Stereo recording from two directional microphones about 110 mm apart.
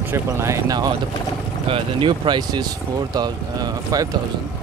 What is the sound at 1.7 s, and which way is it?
Speech, 50° right (ahead or behind).